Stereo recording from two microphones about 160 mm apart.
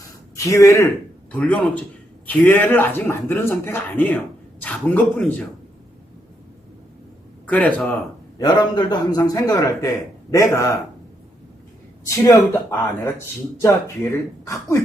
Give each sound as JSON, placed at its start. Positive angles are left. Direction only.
{"t": 0.3, "sound": "speech", "side_deg": 20}
{"t": 1.3, "sound": "speech", "side_deg": 10}
{"t": 7.4, "sound": "speech", "side_deg": 10}
{"t": 8.4, "sound": "a man's voice", "side_deg": 25}
{"t": 12.1, "sound": "a man's voice", "side_deg": 20}